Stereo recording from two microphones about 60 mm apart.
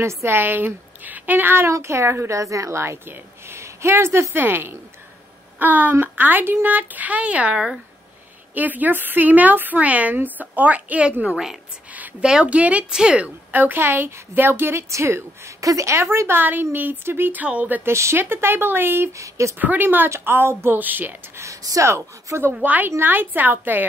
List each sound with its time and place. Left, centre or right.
0.0 s a woman's voice: right
1.7 s a woman's voice: right
7.5 s a woman's voice: centre
8.5 s a woman's voice: right
11.9 s a sound: right
12.3 s a woman's voice: centre
13.5 s a woman's voice: right
15.6 s a woman's voice: right
17.8 s a woman's voice: right
19.1 s speech: right
19.6 s a woman's voice: right
21.4 s speech: right
22.5 s a woman's voice: right